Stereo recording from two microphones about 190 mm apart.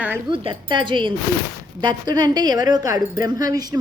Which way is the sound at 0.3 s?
25° right (ahead or behind).